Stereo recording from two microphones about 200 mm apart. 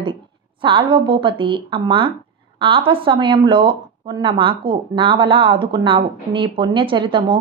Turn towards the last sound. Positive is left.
turn(degrees=-25)  # may be behind; listen again after turning